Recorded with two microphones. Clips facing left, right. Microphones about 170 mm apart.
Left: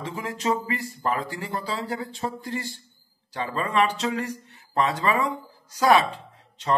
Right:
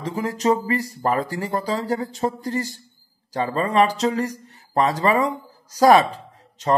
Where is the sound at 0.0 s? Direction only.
40° right (ahead or behind).